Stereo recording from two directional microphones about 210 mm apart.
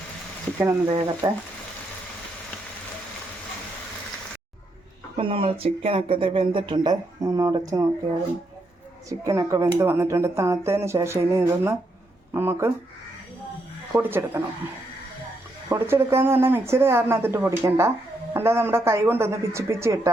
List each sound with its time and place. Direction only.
0.9 s speech: 25° right (ahead or behind)
5.1 s speech: 25° right (ahead or behind)
9.0 s speech: 15° right (ahead or behind)
13.9 s speech: 10° right (ahead or behind)
15.7 s speech: 10° right (ahead or behind)